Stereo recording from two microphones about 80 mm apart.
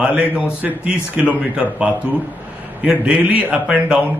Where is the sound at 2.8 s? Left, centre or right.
Centre.